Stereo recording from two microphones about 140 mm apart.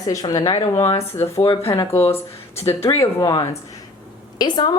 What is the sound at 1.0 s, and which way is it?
Speech, 20° left (ahead or behind).